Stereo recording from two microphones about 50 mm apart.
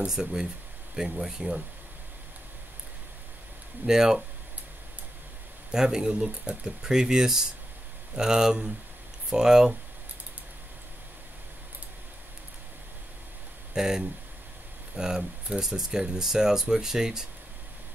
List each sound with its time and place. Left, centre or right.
0.0 s speech: centre
3.8 s speech: centre
5.7 s speech: centre
13.7 s speech: centre